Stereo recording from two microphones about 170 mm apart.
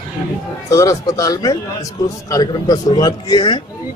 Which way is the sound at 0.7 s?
20° left (ahead or behind).